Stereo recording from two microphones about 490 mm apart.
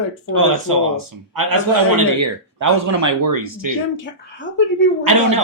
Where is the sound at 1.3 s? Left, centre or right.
Right.